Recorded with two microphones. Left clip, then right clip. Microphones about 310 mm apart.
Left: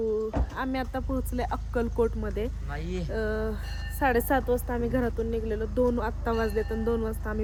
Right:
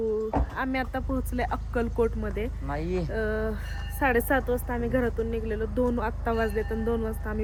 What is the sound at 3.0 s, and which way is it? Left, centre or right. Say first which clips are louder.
Speech: right 1 dB; centre.